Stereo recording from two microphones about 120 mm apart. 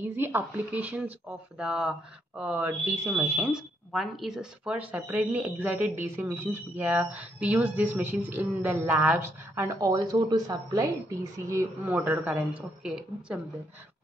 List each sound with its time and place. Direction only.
0.0 s speech: 20° right (ahead or behind)
3.4 s speech: 5° right (ahead or behind)
9.8 s a woman's voice: 30° right (ahead or behind)
12.3 s a woman's voice: 5° right (ahead or behind)